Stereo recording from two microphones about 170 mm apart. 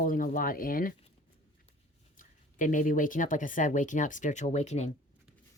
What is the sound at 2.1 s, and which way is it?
Speech, 50° left (ahead or behind).